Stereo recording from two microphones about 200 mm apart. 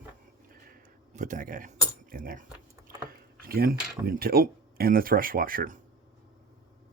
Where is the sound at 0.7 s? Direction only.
40° right (ahead or behind).